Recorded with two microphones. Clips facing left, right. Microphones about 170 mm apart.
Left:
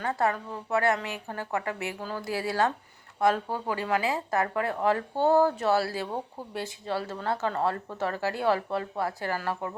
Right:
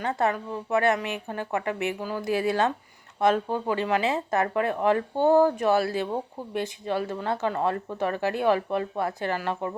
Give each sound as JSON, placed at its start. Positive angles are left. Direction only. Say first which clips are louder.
{"t": 0.0, "sound": "speech", "louder": "right 2 dB", "side_deg": -20}